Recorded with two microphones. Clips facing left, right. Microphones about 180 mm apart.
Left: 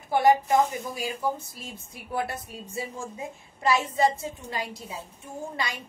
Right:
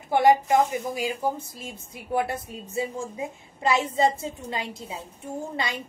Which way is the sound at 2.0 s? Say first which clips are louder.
Right 4 dB; 20° right (ahead or behind).